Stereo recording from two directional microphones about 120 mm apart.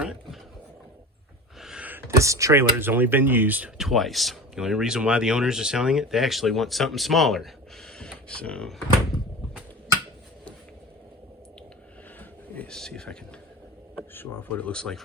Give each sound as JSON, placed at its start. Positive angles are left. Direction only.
{"t": 0.0, "sound": "a sound", "side_deg": -5}
{"t": 1.6, "sound": "speech", "side_deg": -10}
{"t": 3.8, "sound": "speech", "side_deg": 0}
{"t": 12.5, "sound": "speech", "side_deg": 5}
{"t": 14.1, "sound": "speech", "side_deg": 15}